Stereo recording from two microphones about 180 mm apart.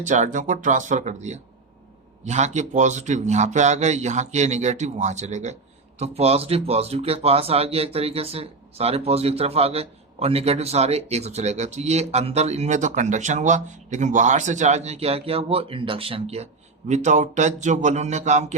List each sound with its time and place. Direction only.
0.0 s speech: 40° right (ahead or behind)